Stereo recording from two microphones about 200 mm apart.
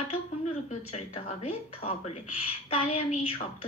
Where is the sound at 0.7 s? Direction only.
30° left (ahead or behind).